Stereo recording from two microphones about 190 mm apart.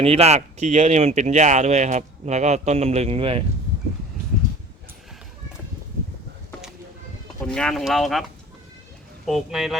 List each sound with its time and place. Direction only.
0.0 s speech: 35° right (ahead or behind)
7.4 s speech: 5° left (ahead or behind)
9.2 s speech: centre (ahead or behind)